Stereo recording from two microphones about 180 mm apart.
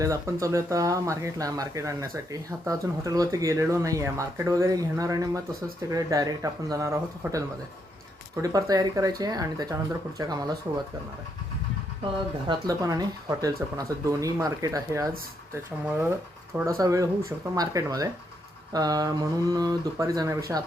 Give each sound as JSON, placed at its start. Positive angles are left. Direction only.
{"t": 0.0, "sound": "speech", "side_deg": -15}
{"t": 12.5, "sound": "speech", "side_deg": -20}